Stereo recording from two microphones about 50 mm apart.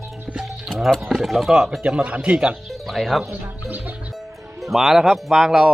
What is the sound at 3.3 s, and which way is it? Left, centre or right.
Speech, right.